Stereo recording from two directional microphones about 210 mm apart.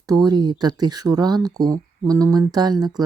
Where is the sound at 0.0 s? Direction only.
20° right (ahead or behind).